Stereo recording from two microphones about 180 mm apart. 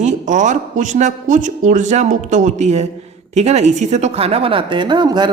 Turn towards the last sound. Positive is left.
turn(degrees=-25)  # may be behind; listen again after turning